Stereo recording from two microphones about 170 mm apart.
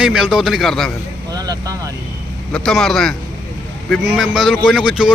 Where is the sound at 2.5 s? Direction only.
5° left (ahead or behind).